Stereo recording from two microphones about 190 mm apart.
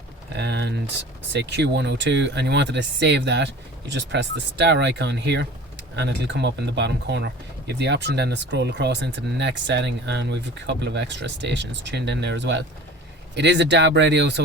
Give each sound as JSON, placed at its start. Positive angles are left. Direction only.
{"t": 0.3, "sound": "speech", "side_deg": -60}